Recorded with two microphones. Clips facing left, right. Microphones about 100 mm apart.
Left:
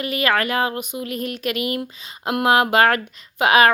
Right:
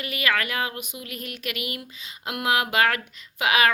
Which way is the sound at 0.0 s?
35° left (ahead or behind).